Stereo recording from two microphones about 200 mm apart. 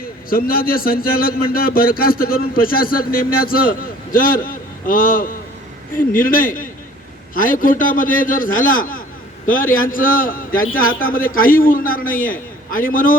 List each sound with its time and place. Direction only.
0.0 s a man's voice: 45° left (ahead or behind)